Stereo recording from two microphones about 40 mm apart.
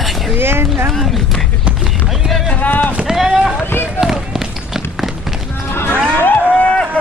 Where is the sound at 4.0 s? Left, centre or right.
Centre.